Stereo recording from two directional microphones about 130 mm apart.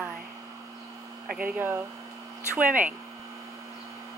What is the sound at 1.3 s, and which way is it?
Speech, 15° right (ahead or behind).